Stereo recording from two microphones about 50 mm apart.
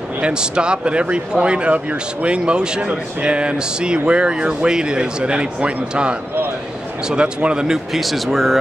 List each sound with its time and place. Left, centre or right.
0.2 s speech: centre
7.9 s speech: centre